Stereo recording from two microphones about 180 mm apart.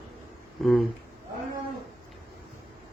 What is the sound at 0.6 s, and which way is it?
Speech, centre (ahead or behind).